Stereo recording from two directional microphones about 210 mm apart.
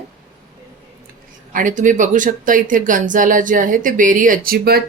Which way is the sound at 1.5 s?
40° right (ahead or behind).